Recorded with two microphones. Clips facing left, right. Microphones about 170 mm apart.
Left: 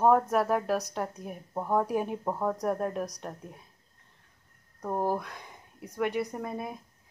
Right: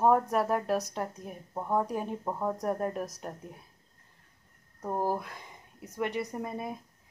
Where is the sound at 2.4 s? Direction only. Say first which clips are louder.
Left 1 dB; centre (ahead or behind).